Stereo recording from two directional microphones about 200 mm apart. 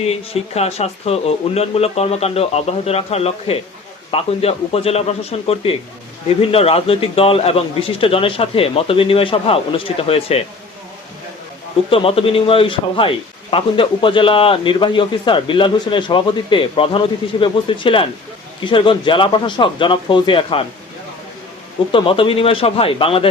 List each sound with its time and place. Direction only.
0.0 s speech: 30° left (ahead or behind)
11.9 s speech: 30° left (ahead or behind)
21.9 s speech: 25° left (ahead or behind)